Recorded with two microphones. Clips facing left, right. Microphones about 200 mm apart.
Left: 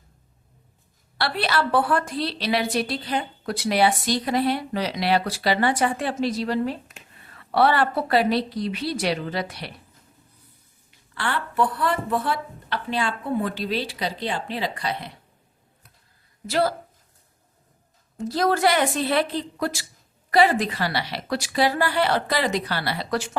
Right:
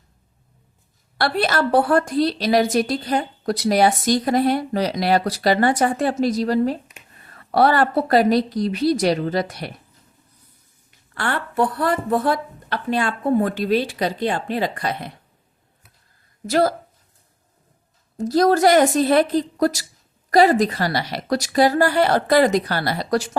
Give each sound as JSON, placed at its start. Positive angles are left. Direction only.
{"t": 1.2, "sound": "a woman's voice", "side_deg": -45}
{"t": 11.1, "sound": "a woman's voice", "side_deg": -45}
{"t": 16.5, "sound": "a woman's voice", "side_deg": -45}
{"t": 18.2, "sound": "a woman's voice", "side_deg": -40}